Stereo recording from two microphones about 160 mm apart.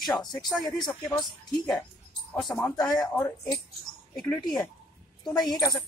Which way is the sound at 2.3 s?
5° left (ahead or behind).